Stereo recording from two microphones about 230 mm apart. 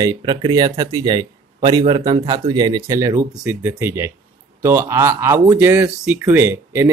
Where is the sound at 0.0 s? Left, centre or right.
Centre.